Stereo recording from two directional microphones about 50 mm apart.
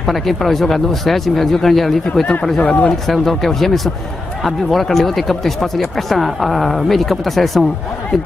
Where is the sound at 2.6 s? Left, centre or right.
Left.